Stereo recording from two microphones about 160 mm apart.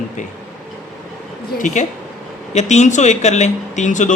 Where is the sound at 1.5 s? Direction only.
55° left (ahead or behind).